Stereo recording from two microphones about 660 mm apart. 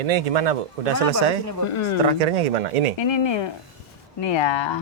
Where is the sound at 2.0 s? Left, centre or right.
Right.